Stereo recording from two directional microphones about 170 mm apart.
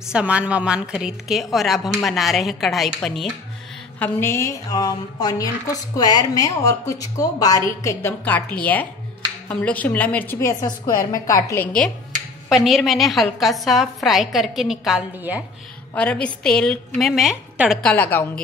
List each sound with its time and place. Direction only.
0.1 s a woman's voice: 5° right (ahead or behind)
4.0 s a woman's voice: 15° left (ahead or behind)
12.4 s a woman's voice: centre (ahead or behind)
15.9 s a woman's voice: 5° left (ahead or behind)
17.9 s a woman's voice: 10° left (ahead or behind)